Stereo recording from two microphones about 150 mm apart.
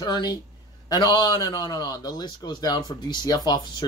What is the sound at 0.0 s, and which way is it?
A man's voice, 25° left (ahead or behind).